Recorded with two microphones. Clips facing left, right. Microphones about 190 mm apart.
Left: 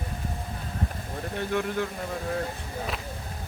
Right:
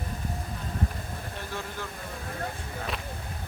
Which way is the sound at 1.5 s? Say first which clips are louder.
Left 11 dB; 60° left (ahead or behind).